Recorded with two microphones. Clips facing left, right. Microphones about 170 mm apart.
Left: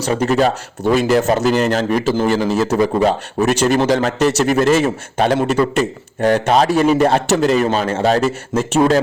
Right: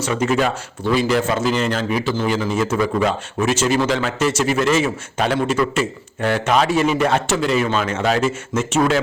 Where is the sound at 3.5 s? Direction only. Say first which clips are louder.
Left 3 dB; 60° left (ahead or behind).